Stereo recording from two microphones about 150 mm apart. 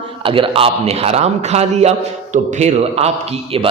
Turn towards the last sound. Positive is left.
turn(degrees=-45)  # may be behind; listen again after turning